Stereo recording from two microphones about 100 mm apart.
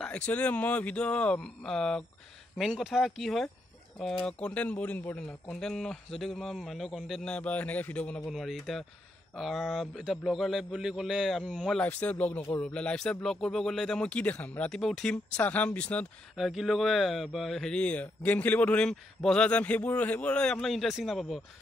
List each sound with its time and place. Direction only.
0.0 s speech: 15° left (ahead or behind)
2.7 s a man's voice: 5° right (ahead or behind)
7.3 s speech: 15° left (ahead or behind)
8.3 s a man's voice: centre (ahead or behind)
11.8 s speech: 15° left (ahead or behind)
16.3 s speech: centre (ahead or behind)